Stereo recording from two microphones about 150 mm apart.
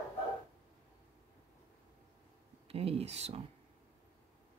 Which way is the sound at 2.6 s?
40° right (ahead or behind).